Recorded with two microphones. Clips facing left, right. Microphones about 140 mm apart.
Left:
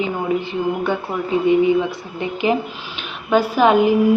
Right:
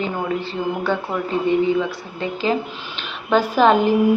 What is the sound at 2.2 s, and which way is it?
A woman's voice, 20° left (ahead or behind).